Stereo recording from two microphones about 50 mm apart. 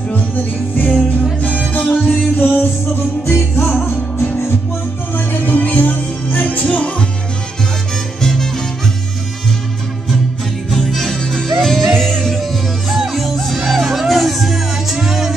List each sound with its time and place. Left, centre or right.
0.7 s music: left
2.0 s music: left
5.1 s music: left
8.2 s music: centre
10.7 s music: centre